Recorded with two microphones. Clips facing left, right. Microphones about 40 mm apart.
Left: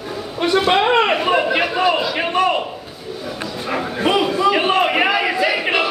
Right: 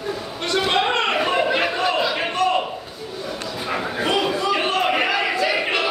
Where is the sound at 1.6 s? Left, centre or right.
Centre.